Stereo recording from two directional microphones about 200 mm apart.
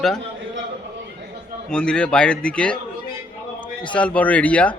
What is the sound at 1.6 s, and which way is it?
A man's voice, 5° left (ahead or behind).